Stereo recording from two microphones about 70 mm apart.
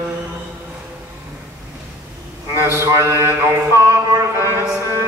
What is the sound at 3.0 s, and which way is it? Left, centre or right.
Mantra, right.